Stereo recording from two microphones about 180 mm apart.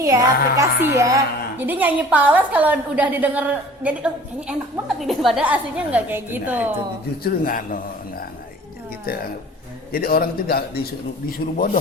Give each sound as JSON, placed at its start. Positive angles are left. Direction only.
{"t": 0.0, "sound": "a woman's voice", "side_deg": -20}
{"t": 7.2, "sound": "a man's voice", "side_deg": 50}
{"t": 9.1, "sound": "a man's voice", "side_deg": 55}